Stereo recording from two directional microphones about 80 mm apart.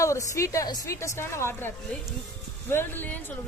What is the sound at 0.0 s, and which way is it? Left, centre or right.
A woman's voice, left.